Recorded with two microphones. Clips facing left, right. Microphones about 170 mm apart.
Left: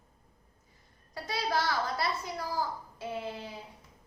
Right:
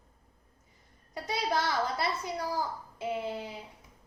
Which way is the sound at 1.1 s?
20° right (ahead or behind).